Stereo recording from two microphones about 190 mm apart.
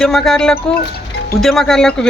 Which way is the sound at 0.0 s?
Centre (ahead or behind).